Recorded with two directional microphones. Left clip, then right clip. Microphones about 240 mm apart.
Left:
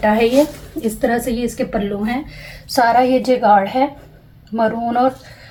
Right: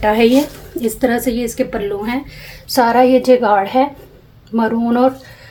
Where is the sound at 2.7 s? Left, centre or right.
Right.